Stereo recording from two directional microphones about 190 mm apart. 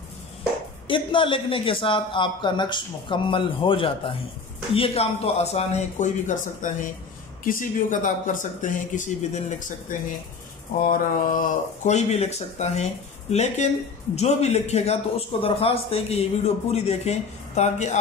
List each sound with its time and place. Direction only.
0.8 s a man's voice: 25° left (ahead or behind)